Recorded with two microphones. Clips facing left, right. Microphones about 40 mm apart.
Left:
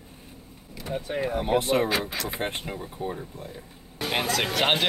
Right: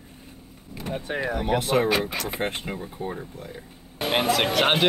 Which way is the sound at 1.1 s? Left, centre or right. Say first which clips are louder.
Right 1 dB; right.